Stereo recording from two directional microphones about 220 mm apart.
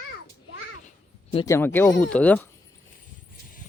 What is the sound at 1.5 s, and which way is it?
Speech, 10° left (ahead or behind).